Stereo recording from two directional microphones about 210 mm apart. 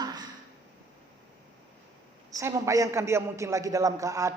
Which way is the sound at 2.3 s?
15° right (ahead or behind).